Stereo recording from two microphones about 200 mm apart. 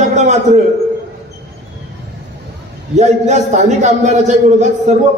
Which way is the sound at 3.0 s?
35° right (ahead or behind).